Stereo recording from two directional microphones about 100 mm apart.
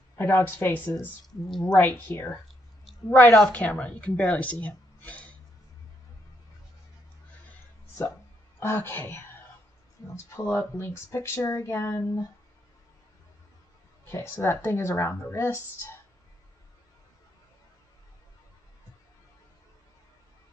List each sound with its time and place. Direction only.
0.2 s a woman's voice: 20° left (ahead or behind)
8.5 s speech: 25° left (ahead or behind)
10.3 s speech: 20° left (ahead or behind)
14.0 s speech: 25° left (ahead or behind)